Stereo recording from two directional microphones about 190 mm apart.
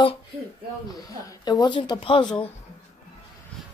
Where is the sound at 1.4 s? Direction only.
20° left (ahead or behind).